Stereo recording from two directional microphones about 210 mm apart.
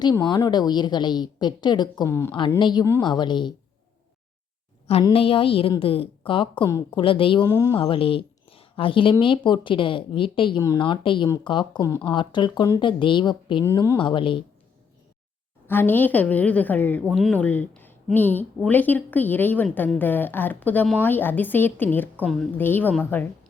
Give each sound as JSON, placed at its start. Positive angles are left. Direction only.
{"t": 0.0, "sound": "speech", "side_deg": 20}
{"t": 5.0, "sound": "a woman's voice", "side_deg": 25}
{"t": 7.8, "sound": "speech", "side_deg": 25}
{"t": 15.6, "sound": "a woman's voice", "side_deg": 10}